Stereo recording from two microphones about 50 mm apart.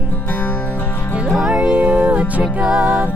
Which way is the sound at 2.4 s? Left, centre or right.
Centre.